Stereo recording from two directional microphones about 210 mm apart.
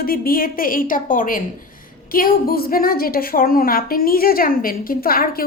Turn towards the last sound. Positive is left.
turn(degrees=45)  # may be behind; listen again after turning